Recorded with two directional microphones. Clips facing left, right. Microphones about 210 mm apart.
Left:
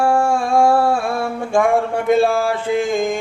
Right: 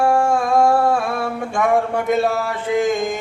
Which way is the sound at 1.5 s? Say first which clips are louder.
Left 2 dB; 30° left (ahead or behind).